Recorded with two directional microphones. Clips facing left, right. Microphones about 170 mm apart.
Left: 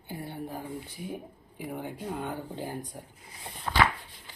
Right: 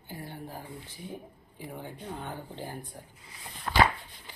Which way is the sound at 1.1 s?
15° left (ahead or behind).